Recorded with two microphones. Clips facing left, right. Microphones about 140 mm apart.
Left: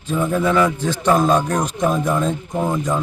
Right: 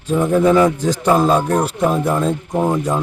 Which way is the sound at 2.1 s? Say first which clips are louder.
Right 2 dB; 35° right (ahead or behind).